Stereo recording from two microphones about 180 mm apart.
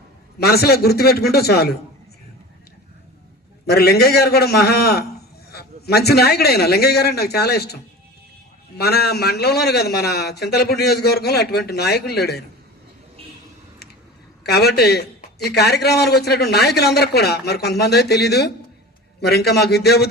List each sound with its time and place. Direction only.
0.3 s a man's voice: 60° left (ahead or behind)
3.7 s a man's voice: 60° left (ahead or behind)
8.8 s a man's voice: 65° left (ahead or behind)
14.4 s a man's voice: 65° left (ahead or behind)